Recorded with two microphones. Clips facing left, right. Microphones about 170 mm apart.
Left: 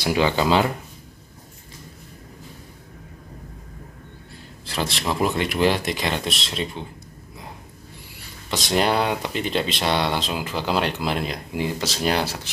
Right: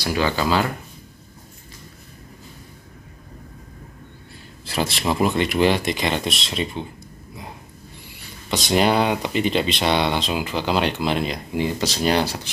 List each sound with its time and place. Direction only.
0.0 s speech: 20° left (ahead or behind)
4.6 s speech: 5° right (ahead or behind)
8.5 s speech: centre (ahead or behind)